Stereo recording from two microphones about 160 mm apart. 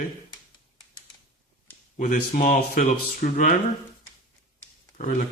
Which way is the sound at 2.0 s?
55° left (ahead or behind).